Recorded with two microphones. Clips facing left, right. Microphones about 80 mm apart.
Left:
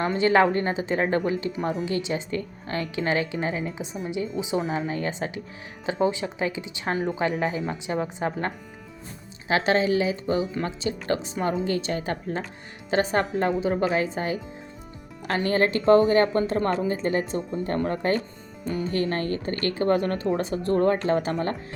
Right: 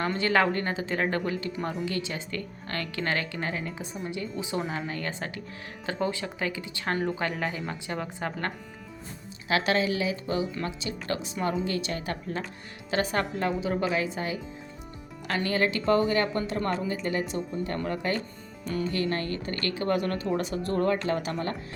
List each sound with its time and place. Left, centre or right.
0.2 s speech: left
9.5 s speech: left